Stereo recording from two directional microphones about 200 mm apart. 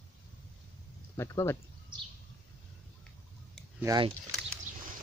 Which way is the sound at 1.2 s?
15° left (ahead or behind).